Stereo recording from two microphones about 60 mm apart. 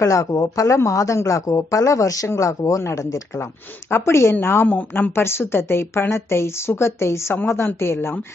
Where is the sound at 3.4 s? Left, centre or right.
Left.